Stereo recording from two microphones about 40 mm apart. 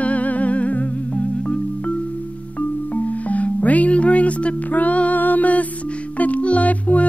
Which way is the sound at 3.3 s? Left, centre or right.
Left.